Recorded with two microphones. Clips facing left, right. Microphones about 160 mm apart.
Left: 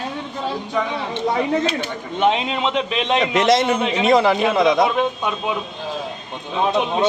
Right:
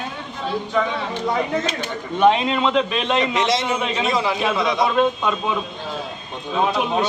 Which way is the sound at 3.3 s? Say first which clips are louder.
Left 4 dB; 55° left (ahead or behind).